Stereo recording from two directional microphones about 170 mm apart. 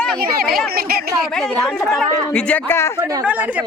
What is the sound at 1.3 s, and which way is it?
A woman's voice, 5° left (ahead or behind).